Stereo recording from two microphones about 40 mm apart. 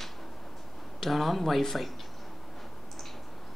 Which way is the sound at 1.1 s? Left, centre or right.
Centre.